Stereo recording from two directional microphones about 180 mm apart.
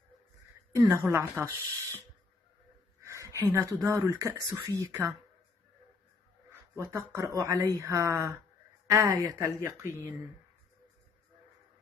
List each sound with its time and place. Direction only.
0.7 s speech: 15° right (ahead or behind)
3.0 s speech: 15° right (ahead or behind)
6.8 s speech: 15° right (ahead or behind)